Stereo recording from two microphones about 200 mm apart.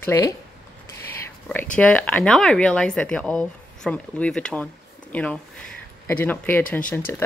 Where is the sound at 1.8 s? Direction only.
5° left (ahead or behind).